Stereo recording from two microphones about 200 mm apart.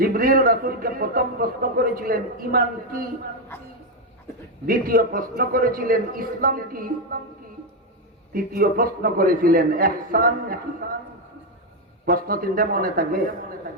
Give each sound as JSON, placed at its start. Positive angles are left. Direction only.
{"t": 0.0, "sound": "a man's voice", "side_deg": -45}
{"t": 3.5, "sound": "a woman's voice", "side_deg": 10}
{"t": 4.6, "sound": "a man's voice", "side_deg": -45}
{"t": 8.3, "sound": "a man's voice", "side_deg": -45}
{"t": 12.0, "sound": "a man's voice", "side_deg": -45}